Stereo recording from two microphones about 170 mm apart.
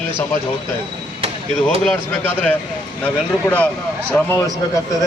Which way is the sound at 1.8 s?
10° left (ahead or behind).